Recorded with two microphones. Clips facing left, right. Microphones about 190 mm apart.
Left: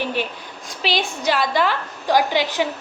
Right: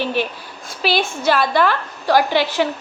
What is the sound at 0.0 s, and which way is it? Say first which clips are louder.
A woman's voice: right 3 dB; 15° left (ahead or behind).